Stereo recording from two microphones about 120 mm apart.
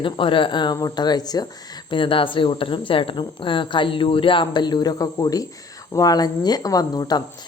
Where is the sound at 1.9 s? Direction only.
45° left (ahead or behind).